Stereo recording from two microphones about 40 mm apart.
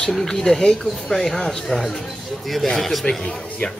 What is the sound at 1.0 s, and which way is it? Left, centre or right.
A man's voice, centre.